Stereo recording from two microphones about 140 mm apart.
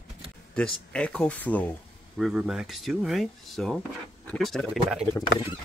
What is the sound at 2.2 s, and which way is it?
Speech, centre (ahead or behind).